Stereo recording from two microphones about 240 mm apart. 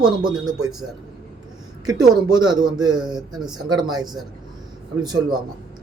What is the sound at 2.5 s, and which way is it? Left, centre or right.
Speech, centre.